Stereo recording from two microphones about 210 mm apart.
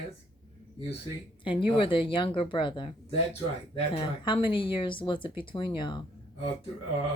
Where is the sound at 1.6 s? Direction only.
25° left (ahead or behind).